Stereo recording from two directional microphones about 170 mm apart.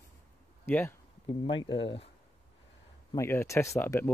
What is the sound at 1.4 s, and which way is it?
Speech, 25° left (ahead or behind).